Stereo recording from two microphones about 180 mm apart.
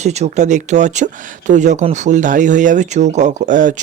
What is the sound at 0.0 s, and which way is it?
Speech, 40° right (ahead or behind).